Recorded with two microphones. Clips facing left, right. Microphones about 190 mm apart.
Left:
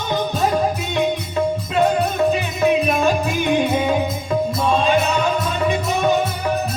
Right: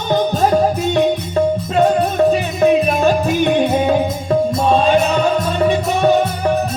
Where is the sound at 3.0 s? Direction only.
40° right (ahead or behind).